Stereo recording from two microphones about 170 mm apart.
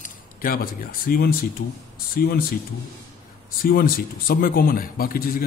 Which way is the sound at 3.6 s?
60° left (ahead or behind).